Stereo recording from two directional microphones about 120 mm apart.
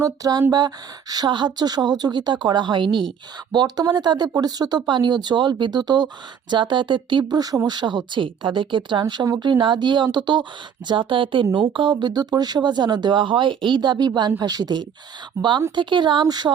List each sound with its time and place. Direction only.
0.0 s speech: 30° right (ahead or behind)